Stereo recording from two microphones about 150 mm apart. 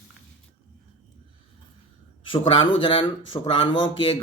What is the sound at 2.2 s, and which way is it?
Speech, 35° left (ahead or behind).